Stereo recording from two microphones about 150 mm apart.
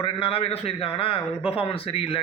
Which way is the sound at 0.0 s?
40° left (ahead or behind).